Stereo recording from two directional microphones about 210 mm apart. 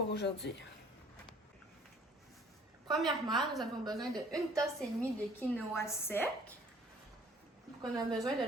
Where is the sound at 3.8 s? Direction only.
20° right (ahead or behind).